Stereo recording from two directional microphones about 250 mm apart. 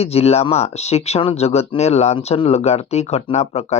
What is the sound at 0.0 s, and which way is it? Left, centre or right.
Speech, left.